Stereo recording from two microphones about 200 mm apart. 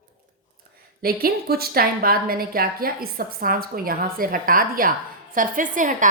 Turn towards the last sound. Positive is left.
turn(degrees=-40)  # may be behind; listen again after turning